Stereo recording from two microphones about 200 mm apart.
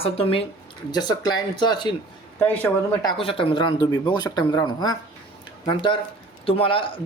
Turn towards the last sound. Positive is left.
turn(degrees=25)  # may be behind; listen again after turning